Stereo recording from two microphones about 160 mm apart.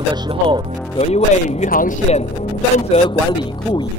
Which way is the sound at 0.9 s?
40° left (ahead or behind).